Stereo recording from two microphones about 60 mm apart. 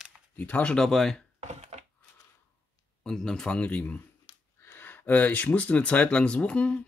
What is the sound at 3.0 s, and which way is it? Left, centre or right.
Speech, centre.